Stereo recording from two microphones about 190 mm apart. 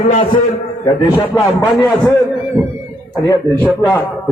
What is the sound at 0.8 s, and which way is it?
A man's voice, 20° left (ahead or behind).